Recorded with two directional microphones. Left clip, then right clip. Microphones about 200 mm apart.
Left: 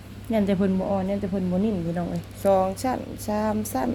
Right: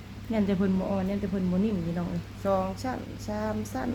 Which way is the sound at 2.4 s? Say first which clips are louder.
Left 7 dB; 35° left (ahead or behind).